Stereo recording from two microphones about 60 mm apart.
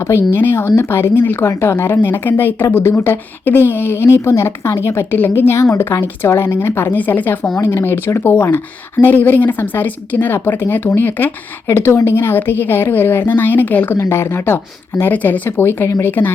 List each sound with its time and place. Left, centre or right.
0.3 s a woman's voice: left
11.7 s a woman's voice: left
13.9 s speech: left